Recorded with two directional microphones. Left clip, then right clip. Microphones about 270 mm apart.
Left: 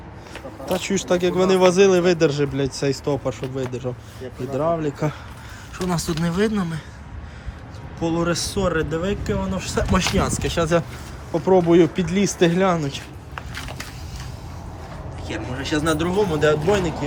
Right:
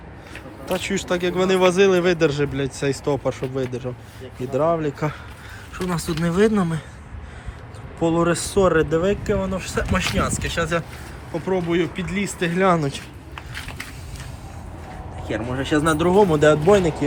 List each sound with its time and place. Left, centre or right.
0.7 s speech: centre
8.0 s speech: centre
15.2 s speech: centre